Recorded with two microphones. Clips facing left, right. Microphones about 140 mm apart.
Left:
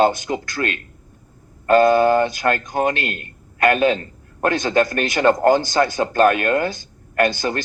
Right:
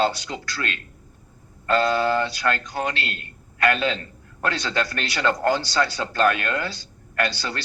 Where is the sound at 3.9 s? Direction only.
50° left (ahead or behind).